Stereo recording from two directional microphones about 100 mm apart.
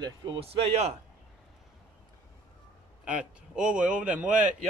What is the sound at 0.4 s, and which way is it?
Speech, 85° right.